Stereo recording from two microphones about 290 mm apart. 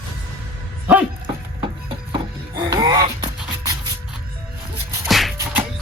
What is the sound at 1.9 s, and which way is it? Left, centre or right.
Music, centre.